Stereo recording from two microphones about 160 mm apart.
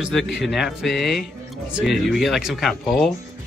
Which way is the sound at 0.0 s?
Centre (ahead or behind).